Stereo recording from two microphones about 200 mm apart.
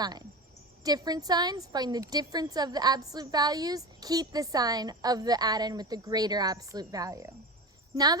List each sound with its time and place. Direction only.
0.9 s a woman's voice: 20° right (ahead or behind)